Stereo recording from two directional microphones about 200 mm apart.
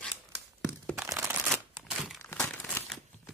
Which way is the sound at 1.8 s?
Centre (ahead or behind).